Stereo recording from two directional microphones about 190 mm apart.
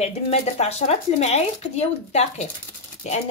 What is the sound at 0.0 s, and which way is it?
Speech, 35° left (ahead or behind).